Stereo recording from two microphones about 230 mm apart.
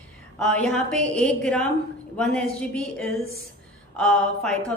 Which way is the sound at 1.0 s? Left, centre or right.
Right.